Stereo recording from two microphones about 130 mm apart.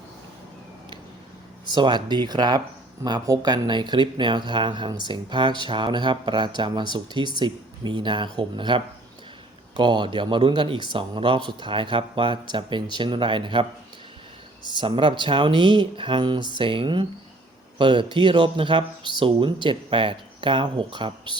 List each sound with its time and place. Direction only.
1.7 s speech: 35° right (ahead or behind)
14.7 s speech: 40° right (ahead or behind)